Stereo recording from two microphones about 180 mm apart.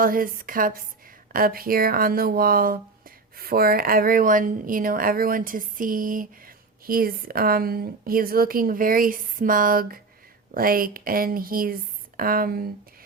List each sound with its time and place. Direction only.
0.0 s speech: 50° right (ahead or behind)